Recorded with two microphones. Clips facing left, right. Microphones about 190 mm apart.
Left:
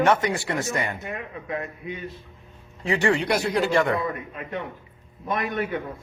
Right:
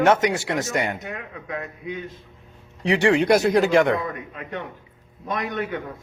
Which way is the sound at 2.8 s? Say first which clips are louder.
Right 3 dB; 70° right (ahead or behind).